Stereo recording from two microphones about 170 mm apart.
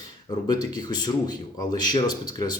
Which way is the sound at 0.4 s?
25° left (ahead or behind).